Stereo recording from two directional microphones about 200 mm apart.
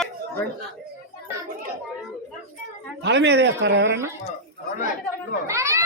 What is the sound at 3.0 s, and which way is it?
Speech, 60° right (ahead or behind).